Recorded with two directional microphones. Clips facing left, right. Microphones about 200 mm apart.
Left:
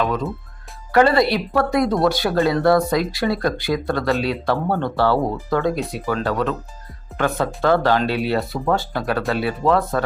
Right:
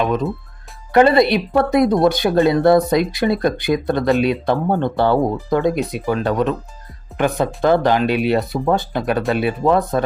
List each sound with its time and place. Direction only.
0.0 s speech: 20° right (ahead or behind)